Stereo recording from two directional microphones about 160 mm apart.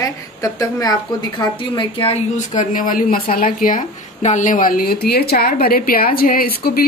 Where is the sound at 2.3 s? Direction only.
55° left (ahead or behind).